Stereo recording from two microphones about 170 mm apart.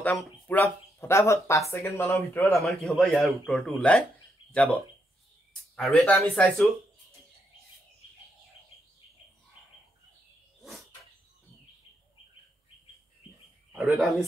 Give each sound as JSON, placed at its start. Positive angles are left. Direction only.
{"t": 0.5, "sound": "speech", "side_deg": 10}
{"t": 2.6, "sound": "speech", "side_deg": 0}
{"t": 5.8, "sound": "speech", "side_deg": 5}
{"t": 13.7, "sound": "speech", "side_deg": -5}